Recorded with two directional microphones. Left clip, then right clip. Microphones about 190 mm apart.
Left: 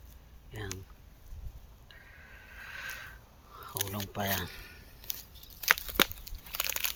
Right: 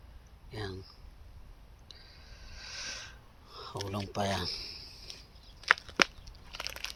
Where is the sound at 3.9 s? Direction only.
10° right (ahead or behind).